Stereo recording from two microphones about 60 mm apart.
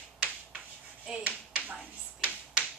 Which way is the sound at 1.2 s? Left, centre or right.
Right.